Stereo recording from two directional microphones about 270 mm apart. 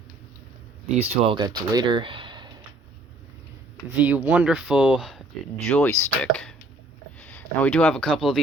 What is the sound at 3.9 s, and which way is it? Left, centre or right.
Speech, centre.